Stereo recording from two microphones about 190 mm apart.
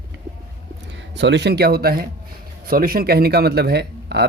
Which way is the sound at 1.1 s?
70° right (ahead or behind).